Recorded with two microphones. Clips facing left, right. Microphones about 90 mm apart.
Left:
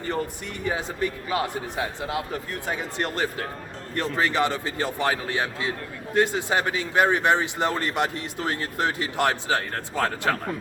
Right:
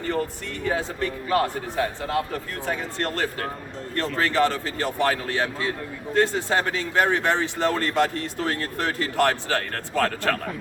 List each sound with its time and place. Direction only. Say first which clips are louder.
0.6 s speech: right 1 dB; 15° left (ahead or behind)